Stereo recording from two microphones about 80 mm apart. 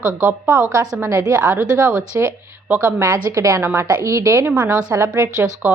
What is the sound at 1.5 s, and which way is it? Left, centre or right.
A woman's voice, right.